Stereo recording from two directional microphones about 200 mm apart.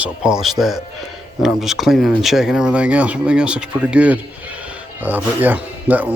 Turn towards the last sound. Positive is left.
turn(degrees=-5)  # may be behind; listen again after turning